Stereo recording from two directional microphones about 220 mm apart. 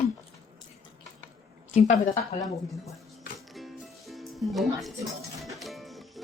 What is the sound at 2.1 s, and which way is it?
Speech, 15° left (ahead or behind).